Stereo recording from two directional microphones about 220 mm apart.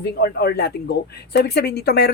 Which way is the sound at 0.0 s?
45° left (ahead or behind).